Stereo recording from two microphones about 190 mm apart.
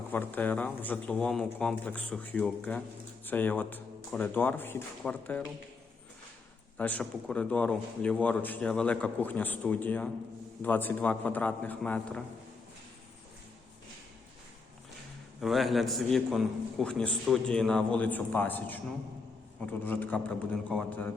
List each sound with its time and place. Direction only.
0.1 s a man's voice: 10° left (ahead or behind)
6.7 s a man's voice: 10° left (ahead or behind)
15.4 s a man's voice: centre (ahead or behind)
19.8 s a man's voice: 10° left (ahead or behind)